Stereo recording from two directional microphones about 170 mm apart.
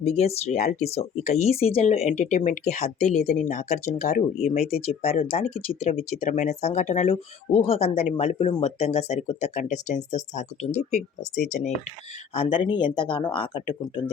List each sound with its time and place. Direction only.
0.0 s speech: 35° left (ahead or behind)
12.3 s speech: 35° left (ahead or behind)